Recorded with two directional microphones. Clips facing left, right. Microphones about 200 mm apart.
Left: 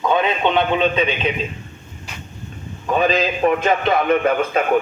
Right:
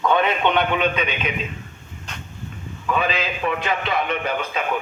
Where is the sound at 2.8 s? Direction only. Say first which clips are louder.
Left 5 dB; 40° left (ahead or behind).